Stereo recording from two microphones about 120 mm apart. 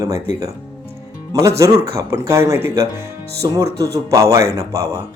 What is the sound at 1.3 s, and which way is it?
Speech, 25° right (ahead or behind).